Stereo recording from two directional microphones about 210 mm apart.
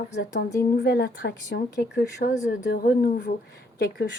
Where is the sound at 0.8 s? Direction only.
55° left (ahead or behind).